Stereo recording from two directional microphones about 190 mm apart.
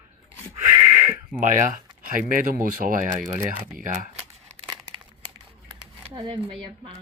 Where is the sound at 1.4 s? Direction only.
40° right (ahead or behind).